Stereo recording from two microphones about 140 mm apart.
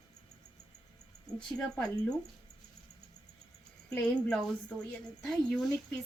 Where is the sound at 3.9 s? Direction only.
5° left (ahead or behind).